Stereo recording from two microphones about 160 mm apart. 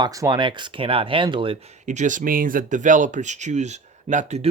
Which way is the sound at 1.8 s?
50° right (ahead or behind).